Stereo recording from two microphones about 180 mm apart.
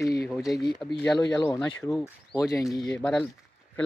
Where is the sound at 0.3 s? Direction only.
Centre (ahead or behind).